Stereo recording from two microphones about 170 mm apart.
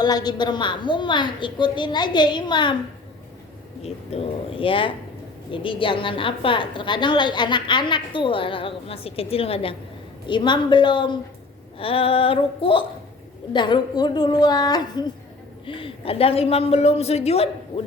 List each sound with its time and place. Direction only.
0.0 s a woman's voice: 25° left (ahead or behind)
3.8 s a woman's voice: 35° left (ahead or behind)